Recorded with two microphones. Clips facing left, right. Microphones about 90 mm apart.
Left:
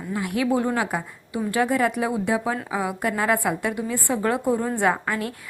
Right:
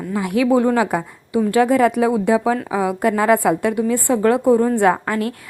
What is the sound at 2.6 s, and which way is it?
Speech, 70° right (ahead or behind).